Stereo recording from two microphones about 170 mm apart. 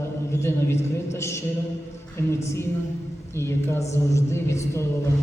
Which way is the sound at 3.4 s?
15° left (ahead or behind).